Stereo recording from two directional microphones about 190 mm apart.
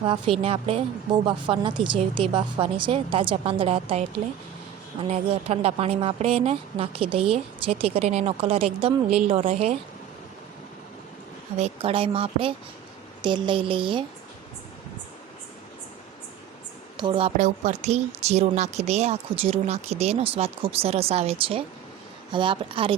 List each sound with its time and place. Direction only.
0.0 s a woman's voice: 30° right (ahead or behind)
11.5 s a woman's voice: 35° right (ahead or behind)
17.0 s a woman's voice: 30° right (ahead or behind)